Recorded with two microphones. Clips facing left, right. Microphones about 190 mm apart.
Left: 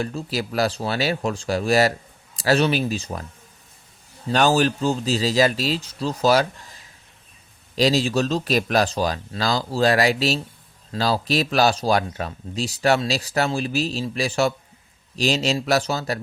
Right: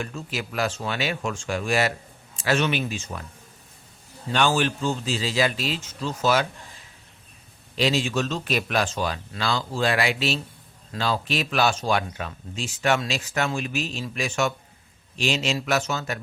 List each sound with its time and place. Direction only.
0.0 s speech: 35° left (ahead or behind)
4.3 s speech: 40° left (ahead or behind)
7.8 s speech: 35° left (ahead or behind)